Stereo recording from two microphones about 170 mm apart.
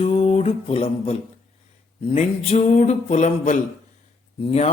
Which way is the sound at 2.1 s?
35° left (ahead or behind).